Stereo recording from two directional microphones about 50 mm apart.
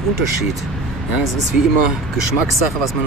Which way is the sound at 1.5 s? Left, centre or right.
Centre.